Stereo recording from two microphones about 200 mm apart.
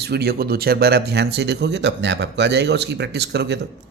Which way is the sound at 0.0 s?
55° right (ahead or behind).